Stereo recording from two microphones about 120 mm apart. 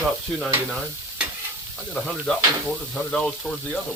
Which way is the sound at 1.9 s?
5° left (ahead or behind).